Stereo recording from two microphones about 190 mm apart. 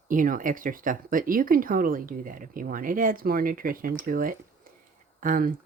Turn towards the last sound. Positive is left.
turn(degrees=-50)  # may be behind; listen again after turning